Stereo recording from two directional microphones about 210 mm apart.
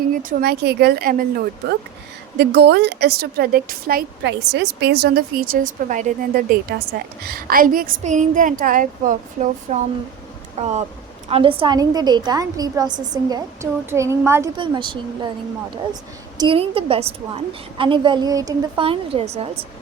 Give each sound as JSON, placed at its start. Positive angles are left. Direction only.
{"t": 0.1, "sound": "a woman's voice", "side_deg": -40}
{"t": 2.4, "sound": "a woman's voice", "side_deg": -55}
{"t": 16.4, "sound": "a woman's voice", "side_deg": -25}